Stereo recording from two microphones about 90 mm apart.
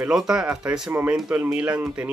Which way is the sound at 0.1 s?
5° right (ahead or behind).